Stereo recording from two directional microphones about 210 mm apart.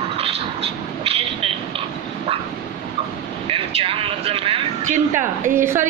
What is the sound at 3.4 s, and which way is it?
Vehicle, 25° right (ahead or behind).